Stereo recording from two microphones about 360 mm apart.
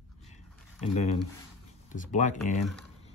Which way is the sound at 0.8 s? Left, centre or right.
Centre.